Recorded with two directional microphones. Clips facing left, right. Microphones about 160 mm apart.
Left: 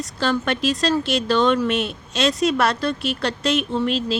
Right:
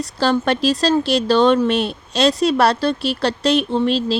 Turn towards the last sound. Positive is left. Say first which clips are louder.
# right 4 dB
turn(degrees=-35)  # may be behind; listen again after turning